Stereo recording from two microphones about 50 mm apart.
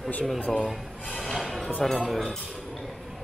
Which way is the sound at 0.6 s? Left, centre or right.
Centre.